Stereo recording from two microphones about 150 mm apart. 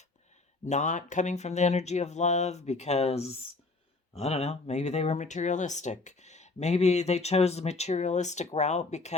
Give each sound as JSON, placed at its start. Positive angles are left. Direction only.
{"t": 0.6, "sound": "speech", "side_deg": 55}